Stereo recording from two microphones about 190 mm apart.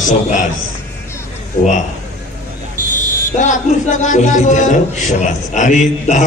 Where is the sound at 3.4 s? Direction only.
40° left (ahead or behind).